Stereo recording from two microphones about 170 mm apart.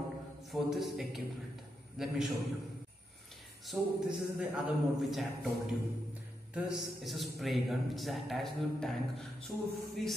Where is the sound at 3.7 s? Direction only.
Centre (ahead or behind).